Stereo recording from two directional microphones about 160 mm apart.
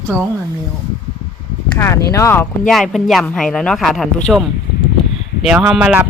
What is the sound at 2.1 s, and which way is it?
Speech, 15° left (ahead or behind).